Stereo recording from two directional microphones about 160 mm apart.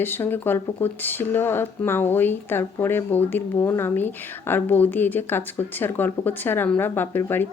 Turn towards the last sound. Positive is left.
turn(degrees=15)  # may be behind; listen again after turning